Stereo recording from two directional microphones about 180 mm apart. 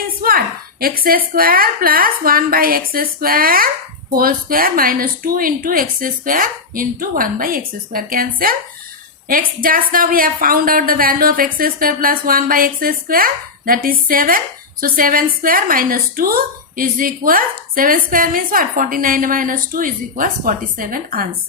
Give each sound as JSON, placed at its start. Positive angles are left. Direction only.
{"t": 0.2, "sound": "a woman's voice", "side_deg": -55}